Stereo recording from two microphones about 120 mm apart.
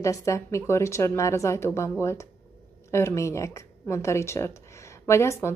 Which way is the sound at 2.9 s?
20° left (ahead or behind).